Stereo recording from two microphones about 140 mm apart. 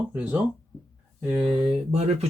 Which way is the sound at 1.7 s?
50° right (ahead or behind).